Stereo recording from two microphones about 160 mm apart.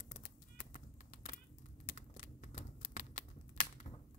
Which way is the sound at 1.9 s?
50° left (ahead or behind).